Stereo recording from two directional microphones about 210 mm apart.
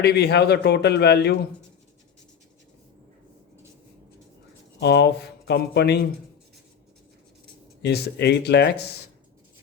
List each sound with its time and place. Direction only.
0.0 s a man's voice: 50° left (ahead or behind)
4.8 s a man's voice: 55° left (ahead or behind)
7.8 s a man's voice: 50° left (ahead or behind)